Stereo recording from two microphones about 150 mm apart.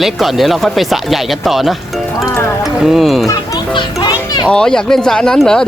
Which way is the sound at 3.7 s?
30° left (ahead or behind).